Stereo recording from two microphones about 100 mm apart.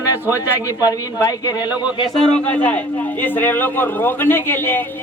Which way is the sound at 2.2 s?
10° left (ahead or behind).